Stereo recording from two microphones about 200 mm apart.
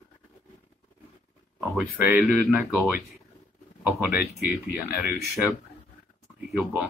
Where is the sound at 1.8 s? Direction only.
10° right (ahead or behind).